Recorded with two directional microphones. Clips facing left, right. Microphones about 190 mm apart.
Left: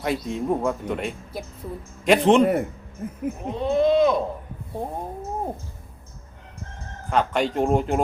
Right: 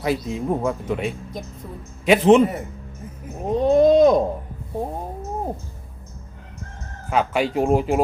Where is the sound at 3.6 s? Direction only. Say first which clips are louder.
Right 5 dB; 40° right (ahead or behind).